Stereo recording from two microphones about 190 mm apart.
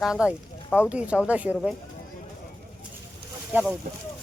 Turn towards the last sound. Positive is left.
turn(degrees=-5)  # may be behind; listen again after turning